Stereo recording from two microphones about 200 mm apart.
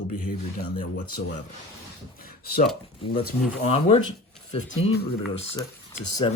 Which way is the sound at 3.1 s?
50° left (ahead or behind).